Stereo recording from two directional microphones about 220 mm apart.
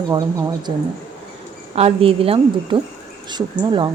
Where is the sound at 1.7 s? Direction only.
25° right (ahead or behind).